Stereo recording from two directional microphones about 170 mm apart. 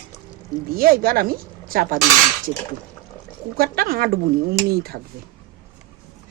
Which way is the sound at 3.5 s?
65° right (ahead or behind).